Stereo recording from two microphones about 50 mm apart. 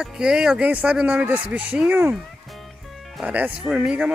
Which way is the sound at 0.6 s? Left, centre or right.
Right.